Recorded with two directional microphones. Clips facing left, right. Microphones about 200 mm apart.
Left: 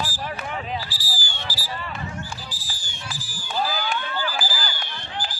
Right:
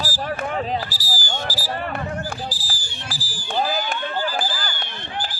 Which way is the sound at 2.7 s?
35° right (ahead or behind).